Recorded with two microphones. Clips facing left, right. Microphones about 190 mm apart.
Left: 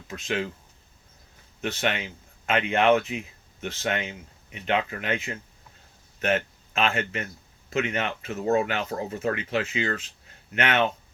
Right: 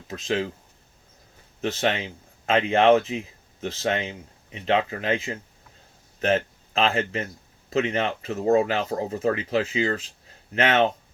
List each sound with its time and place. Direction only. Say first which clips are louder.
0.1 s speech: right 3 dB; 35° right (ahead or behind)
1.8 s speech: right 3 dB; 30° right (ahead or behind)